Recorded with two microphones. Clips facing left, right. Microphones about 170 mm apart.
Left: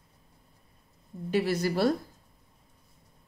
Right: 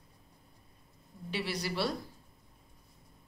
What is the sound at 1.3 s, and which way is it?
Speech, 45° left (ahead or behind).